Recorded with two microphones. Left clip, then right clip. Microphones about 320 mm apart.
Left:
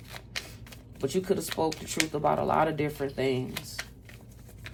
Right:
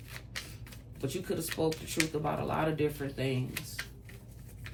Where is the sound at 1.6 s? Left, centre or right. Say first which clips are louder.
Left 3 dB; left.